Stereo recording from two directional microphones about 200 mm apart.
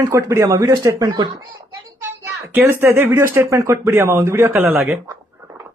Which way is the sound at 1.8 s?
10° right (ahead or behind).